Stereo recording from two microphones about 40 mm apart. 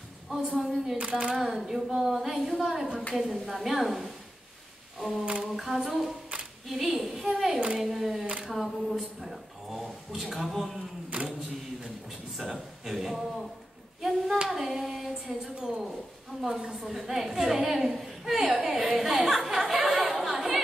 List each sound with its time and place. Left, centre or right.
0.6 s single-lens reflex camera: centre
0.9 s a sound: right
1.3 s humming: centre
1.6 s a woman's voice: centre
4.9 s a sound: centre
5.4 s humming: centre
6.7 s speech: centre
7.2 s humming: centre
7.7 s a woman's voice: centre
12.4 s a woman's voice: centre
14.0 s humming: centre
16.8 s a woman's voice: centre